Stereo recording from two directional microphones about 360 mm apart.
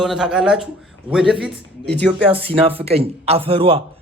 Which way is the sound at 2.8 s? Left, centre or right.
Centre.